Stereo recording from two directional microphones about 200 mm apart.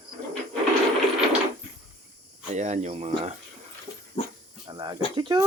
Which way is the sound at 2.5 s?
35° right (ahead or behind).